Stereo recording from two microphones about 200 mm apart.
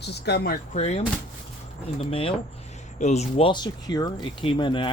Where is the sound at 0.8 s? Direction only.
30° left (ahead or behind).